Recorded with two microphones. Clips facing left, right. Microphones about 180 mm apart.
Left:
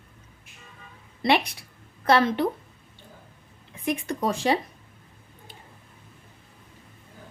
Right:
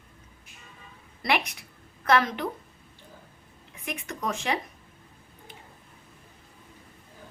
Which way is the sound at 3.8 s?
30° left (ahead or behind).